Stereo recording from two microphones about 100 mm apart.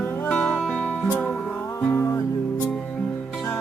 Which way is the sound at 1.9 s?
25° left (ahead or behind).